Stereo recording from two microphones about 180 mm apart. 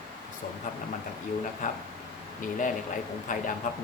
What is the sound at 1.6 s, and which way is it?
Speech, 45° left (ahead or behind).